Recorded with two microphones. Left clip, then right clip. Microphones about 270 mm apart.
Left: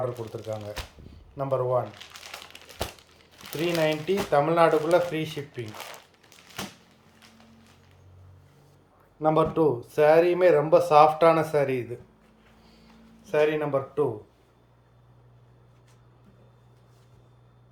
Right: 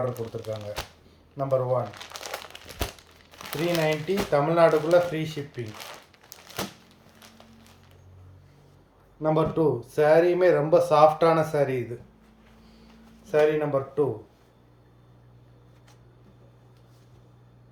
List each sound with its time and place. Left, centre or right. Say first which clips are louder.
0.4 s speech: even; left
1.4 s speech: right 1 dB; centre
3.3 s crumpling: right 5 dB; centre
3.7 s speech: even; centre
9.2 s speech: left 1 dB; centre
13.2 s speech: right 2 dB; centre